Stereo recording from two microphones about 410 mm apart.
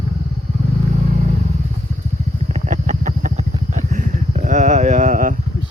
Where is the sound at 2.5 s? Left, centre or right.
Centre.